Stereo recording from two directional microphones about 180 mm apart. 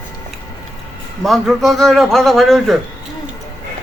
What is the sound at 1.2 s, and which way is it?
A man's voice, centre (ahead or behind).